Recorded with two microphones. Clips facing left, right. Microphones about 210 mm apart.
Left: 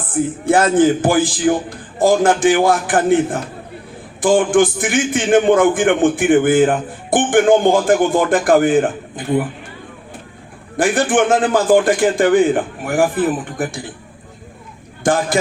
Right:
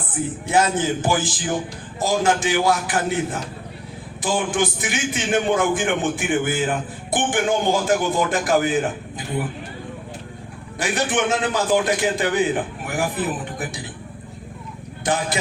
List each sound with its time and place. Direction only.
0.1 s a man's voice: 50° left (ahead or behind)
10.8 s a man's voice: 50° left (ahead or behind)
15.0 s a man's voice: 50° left (ahead or behind)